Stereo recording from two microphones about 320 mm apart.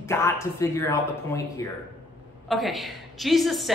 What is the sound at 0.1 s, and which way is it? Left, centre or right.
Speech, centre.